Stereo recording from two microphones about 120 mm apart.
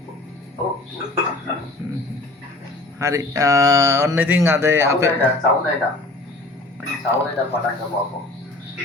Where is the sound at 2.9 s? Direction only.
25° right (ahead or behind).